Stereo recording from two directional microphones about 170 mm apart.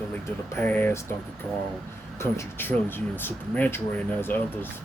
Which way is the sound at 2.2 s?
15° left (ahead or behind).